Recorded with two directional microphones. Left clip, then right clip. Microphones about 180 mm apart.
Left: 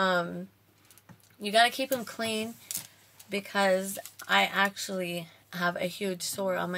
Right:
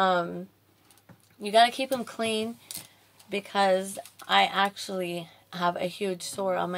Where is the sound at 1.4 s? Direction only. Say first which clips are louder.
Right 3 dB; 20° left (ahead or behind).